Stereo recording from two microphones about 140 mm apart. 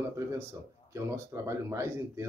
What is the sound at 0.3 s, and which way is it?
Speech, 20° right (ahead or behind).